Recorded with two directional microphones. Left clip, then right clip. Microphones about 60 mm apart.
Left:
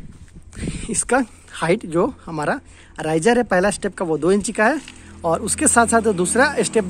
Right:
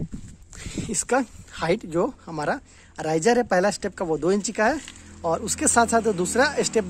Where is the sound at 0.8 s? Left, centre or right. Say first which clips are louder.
Left 4 dB; right.